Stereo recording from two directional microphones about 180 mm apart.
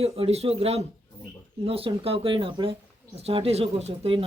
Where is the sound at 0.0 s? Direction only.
35° right (ahead or behind).